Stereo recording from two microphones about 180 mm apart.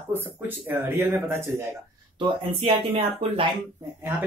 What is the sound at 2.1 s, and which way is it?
Speech, 30° right (ahead or behind).